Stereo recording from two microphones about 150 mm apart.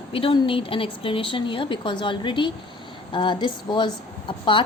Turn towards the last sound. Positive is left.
turn(degrees=35)  # may be behind; listen again after turning